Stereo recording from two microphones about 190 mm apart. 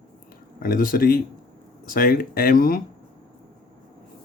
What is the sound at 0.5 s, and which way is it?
Speech, 45° left (ahead or behind).